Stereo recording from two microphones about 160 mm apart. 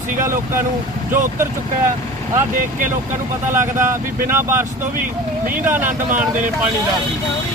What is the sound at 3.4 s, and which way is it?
Speech, 15° right (ahead or behind).